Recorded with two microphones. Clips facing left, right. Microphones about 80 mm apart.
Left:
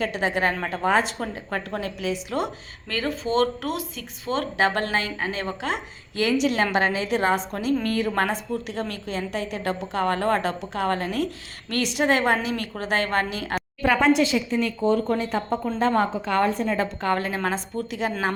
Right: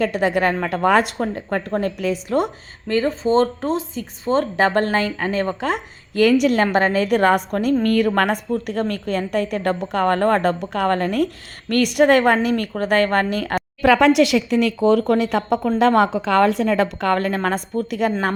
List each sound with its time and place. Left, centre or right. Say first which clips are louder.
0.0 s a woman's voice: right 5 dB; right
1.4 s a woman's voice: right 8 dB; right
13.8 s a woman's voice: right 6 dB; right
15.8 s a woman's voice: right 6 dB; right